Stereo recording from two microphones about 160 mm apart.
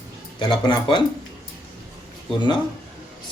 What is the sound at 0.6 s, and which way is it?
Speech, 30° left (ahead or behind).